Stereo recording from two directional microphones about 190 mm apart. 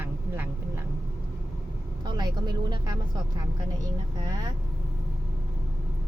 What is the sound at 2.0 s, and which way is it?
Speech, 20° right (ahead or behind).